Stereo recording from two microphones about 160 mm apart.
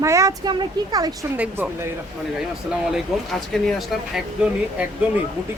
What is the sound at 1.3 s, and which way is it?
A woman's voice, 10° right (ahead or behind).